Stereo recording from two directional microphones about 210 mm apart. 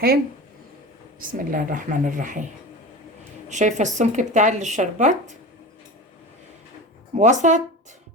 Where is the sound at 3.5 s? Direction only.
35° right (ahead or behind).